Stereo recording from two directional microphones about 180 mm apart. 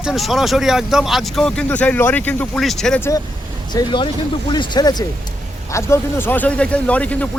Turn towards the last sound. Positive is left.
turn(degrees=10)  # may be behind; listen again after turning